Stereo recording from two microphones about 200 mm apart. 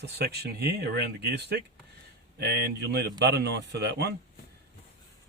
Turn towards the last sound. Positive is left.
turn(degrees=-55)  # may be behind; listen again after turning